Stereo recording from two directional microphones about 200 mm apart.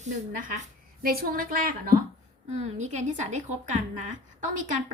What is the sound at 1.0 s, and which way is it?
A woman's voice, 50° right (ahead or behind).